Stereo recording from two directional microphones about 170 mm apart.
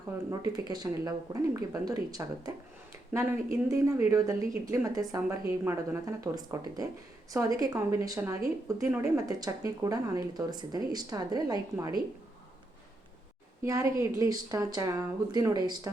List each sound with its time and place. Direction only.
0.3 s a woman's voice: 25° right (ahead or behind)
13.6 s speech: 20° right (ahead or behind)